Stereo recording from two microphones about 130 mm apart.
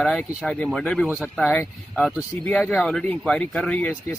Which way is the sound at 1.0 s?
10° right (ahead or behind).